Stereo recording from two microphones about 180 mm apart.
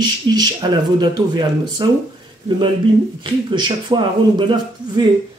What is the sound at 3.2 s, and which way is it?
Speech, 25° right (ahead or behind).